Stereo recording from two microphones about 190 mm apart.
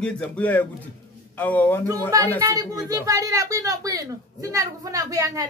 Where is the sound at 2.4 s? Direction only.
20° right (ahead or behind).